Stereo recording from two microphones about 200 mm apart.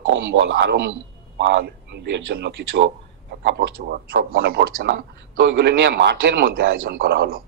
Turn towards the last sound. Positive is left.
turn(degrees=-50)  # may be behind; listen again after turning